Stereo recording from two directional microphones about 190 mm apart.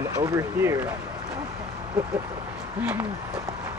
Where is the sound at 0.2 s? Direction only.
15° right (ahead or behind).